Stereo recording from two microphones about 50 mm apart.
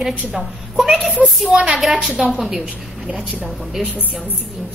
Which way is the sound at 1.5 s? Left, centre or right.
Centre.